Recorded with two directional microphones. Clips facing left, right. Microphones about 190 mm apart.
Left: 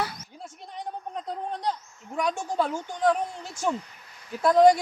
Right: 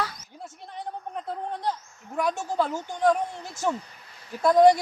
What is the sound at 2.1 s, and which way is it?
Speech, 15° left (ahead or behind).